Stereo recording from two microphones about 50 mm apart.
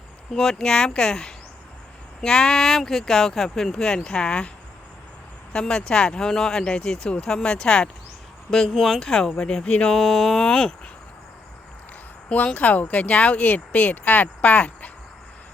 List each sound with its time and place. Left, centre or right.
0.3 s speech: centre
5.5 s speech: centre
8.4 s speech: centre
9.0 s speech: centre
9.9 s speech: centre
12.5 s speech: left